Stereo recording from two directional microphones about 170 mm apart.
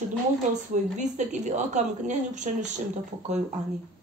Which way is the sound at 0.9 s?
45° right (ahead or behind).